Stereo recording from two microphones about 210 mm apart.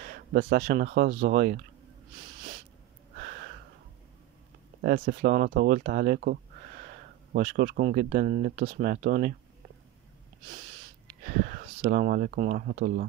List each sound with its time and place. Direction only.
0.0 s speech: 45° right (ahead or behind)
3.2 s a sound: 45° right (ahead or behind)
4.8 s speech: 45° right (ahead or behind)
7.3 s speech: 45° right (ahead or behind)
11.3 s speech: 45° right (ahead or behind)